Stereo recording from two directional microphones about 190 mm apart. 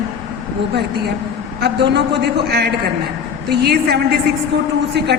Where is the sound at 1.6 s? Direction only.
60° right (ahead or behind).